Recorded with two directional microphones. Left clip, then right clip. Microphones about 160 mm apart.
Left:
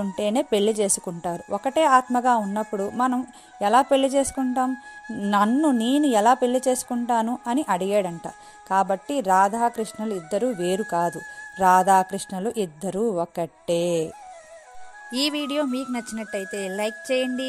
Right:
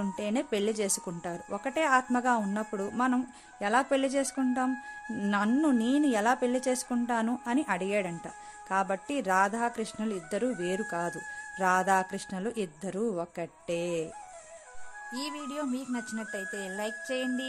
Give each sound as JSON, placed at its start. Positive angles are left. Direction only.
{"t": 0.0, "sound": "a woman's voice", "side_deg": 30}
{"t": 15.0, "sound": "speech", "side_deg": 45}